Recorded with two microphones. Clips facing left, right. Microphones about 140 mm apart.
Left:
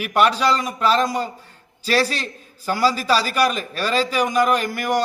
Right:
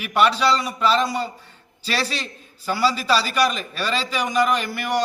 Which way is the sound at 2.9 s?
45° left (ahead or behind).